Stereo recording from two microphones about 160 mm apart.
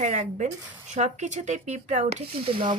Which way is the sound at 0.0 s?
50° right (ahead or behind).